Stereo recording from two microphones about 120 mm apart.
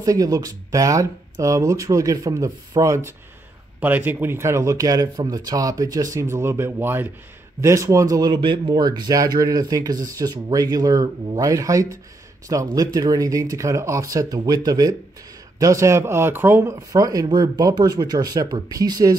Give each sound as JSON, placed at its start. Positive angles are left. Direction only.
{"t": 0.0, "sound": "speech", "side_deg": -30}
{"t": 8.4, "sound": "speech", "side_deg": -40}